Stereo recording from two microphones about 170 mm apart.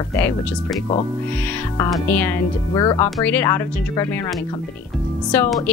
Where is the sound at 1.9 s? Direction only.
10° left (ahead or behind).